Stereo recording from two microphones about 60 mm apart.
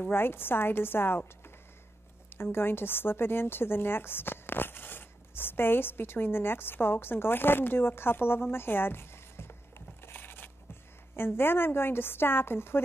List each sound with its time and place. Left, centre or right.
0.0 s a woman's voice: left
2.2 s a woman's voice: left
10.1 s a sound: left
11.1 s a woman's voice: left